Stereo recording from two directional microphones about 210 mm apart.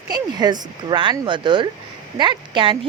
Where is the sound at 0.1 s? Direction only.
20° right (ahead or behind).